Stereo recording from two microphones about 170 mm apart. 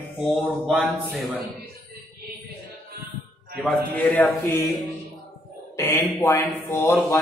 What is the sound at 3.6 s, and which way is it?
A man's voice, 5° left (ahead or behind).